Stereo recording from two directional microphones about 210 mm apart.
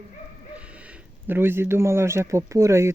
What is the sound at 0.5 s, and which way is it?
Speech, 5° right (ahead or behind).